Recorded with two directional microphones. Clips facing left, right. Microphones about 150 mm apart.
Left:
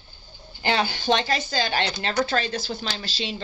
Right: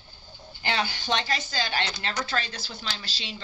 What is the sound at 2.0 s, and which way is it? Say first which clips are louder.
Speech: left 6 dB; 25° left (ahead or behind).